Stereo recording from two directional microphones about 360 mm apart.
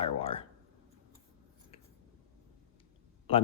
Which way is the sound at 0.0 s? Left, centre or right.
Centre.